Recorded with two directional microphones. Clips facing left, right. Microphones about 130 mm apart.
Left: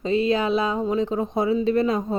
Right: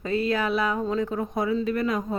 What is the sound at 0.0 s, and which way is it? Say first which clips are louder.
Speech: left 4 dB; 20° left (ahead or behind).